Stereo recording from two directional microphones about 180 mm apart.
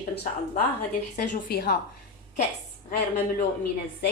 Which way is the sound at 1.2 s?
60° left (ahead or behind).